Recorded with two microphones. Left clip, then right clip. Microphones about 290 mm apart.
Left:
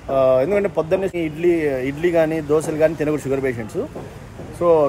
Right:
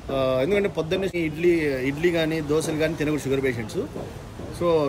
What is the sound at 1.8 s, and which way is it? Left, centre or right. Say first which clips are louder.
Speech: left 3 dB; right.